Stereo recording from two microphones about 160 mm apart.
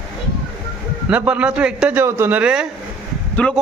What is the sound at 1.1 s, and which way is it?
A man's voice, 10° right (ahead or behind).